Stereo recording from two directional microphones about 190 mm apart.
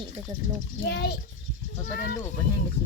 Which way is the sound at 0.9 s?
60° left (ahead or behind).